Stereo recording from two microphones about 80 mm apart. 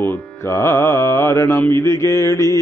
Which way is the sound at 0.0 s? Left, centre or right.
Left.